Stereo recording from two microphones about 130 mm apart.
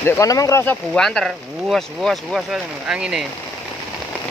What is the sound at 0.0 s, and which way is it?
Speech, 25° left (ahead or behind).